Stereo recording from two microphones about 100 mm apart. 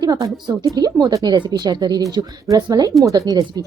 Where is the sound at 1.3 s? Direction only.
50° right (ahead or behind).